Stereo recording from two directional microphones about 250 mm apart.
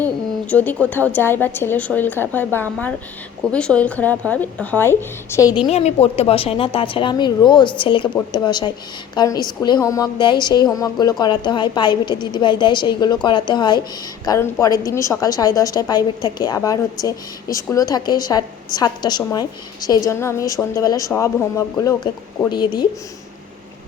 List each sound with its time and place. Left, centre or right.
0.0 s a woman's voice: centre
5.7 s a woman's voice: left